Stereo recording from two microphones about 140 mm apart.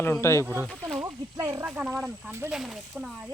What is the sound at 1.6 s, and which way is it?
Speech, 10° right (ahead or behind).